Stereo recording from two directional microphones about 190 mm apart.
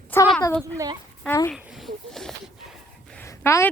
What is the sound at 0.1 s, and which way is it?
Speech, 10° left (ahead or behind).